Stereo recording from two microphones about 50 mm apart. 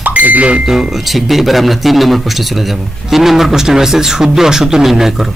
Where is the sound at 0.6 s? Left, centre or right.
Centre.